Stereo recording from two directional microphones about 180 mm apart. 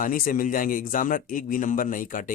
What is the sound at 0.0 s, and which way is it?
A man's voice, 50° left (ahead or behind).